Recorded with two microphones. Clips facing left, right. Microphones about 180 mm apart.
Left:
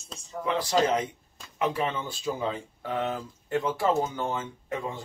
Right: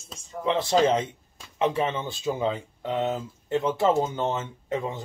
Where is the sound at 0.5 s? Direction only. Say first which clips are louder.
Right 3 dB; 25° right (ahead or behind).